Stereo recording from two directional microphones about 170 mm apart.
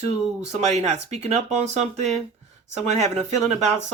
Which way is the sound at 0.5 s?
40° right (ahead or behind).